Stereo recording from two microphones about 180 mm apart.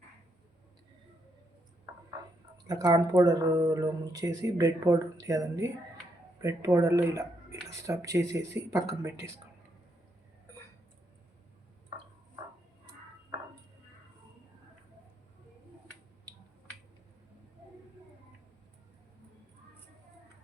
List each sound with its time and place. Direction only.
2.6 s speech: 20° right (ahead or behind)